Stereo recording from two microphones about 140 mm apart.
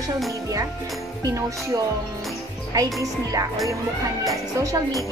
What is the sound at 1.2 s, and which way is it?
Speech, 25° right (ahead or behind).